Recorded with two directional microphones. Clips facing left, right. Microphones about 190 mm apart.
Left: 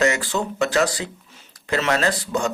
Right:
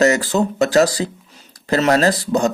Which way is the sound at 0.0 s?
40° right (ahead or behind).